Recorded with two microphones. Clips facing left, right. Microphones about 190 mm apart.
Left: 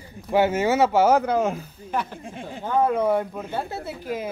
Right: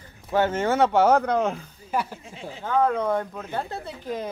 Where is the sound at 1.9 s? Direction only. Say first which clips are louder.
Right 1 dB; 5° right (ahead or behind).